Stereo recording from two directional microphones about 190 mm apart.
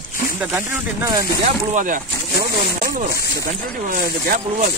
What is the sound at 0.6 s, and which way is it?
Speech, 20° right (ahead or behind).